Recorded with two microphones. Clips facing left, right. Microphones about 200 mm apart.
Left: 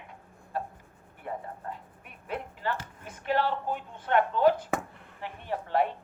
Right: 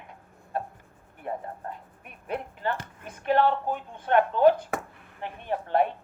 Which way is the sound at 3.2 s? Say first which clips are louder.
Right 5 dB; 55° right (ahead or behind).